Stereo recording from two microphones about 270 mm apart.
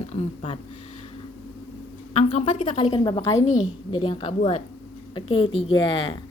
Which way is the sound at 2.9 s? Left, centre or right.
Centre.